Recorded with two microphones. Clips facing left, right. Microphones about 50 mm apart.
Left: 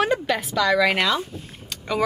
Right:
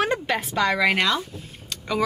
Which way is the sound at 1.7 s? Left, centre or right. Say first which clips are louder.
Left 1 dB; centre.